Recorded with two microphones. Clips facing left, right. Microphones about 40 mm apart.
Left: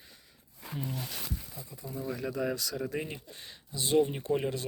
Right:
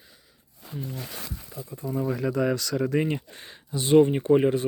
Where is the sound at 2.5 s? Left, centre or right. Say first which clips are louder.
Right 9 dB; right.